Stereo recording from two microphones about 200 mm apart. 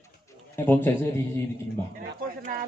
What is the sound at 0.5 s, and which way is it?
Speech, 10° left (ahead or behind).